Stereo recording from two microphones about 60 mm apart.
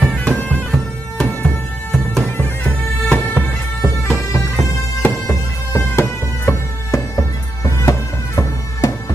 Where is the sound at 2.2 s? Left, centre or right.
Left.